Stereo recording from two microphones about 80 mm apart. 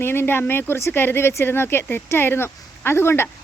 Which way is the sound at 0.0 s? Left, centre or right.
Left.